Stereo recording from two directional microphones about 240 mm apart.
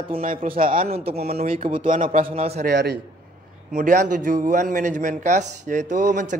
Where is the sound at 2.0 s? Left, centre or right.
Right.